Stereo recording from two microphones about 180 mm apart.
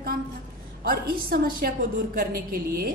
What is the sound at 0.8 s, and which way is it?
A woman's voice, 55° right (ahead or behind).